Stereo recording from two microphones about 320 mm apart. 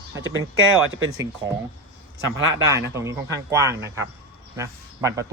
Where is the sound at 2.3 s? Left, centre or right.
Centre.